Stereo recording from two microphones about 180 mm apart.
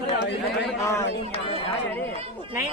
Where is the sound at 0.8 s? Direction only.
15° left (ahead or behind).